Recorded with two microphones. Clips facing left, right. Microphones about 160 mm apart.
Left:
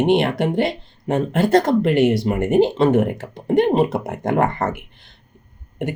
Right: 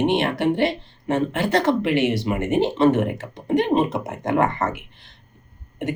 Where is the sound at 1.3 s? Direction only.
45° left (ahead or behind).